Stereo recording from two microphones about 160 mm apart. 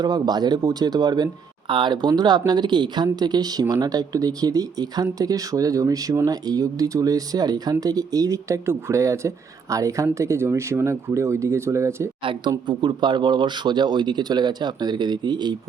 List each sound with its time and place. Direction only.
0.0 s speech: 25° right (ahead or behind)
12.2 s speech: 25° right (ahead or behind)